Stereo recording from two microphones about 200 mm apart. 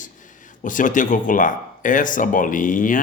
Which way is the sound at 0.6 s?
40° left (ahead or behind).